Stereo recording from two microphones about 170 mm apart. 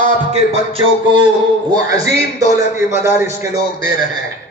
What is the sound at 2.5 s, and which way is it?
Speech, 15° right (ahead or behind).